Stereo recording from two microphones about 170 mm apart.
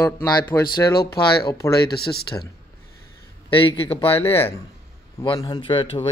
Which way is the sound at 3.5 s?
30° left (ahead or behind).